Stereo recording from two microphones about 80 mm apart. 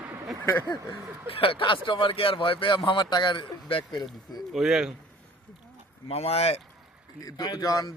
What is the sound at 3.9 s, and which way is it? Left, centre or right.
Speech, left.